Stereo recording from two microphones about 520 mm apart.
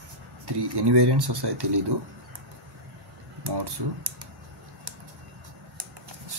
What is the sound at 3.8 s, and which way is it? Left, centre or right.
Speech, right.